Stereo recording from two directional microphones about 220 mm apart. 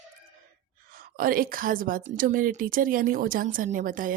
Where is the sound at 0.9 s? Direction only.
40° right (ahead or behind).